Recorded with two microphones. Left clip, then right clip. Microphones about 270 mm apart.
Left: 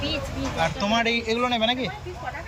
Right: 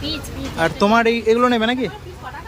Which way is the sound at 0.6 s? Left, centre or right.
Centre.